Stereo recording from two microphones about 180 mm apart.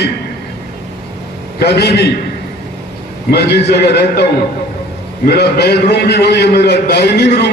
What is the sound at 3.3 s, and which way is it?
Speech, 65° left (ahead or behind).